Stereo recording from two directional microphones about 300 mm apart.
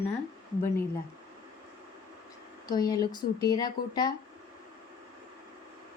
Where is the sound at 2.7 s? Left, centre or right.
Centre.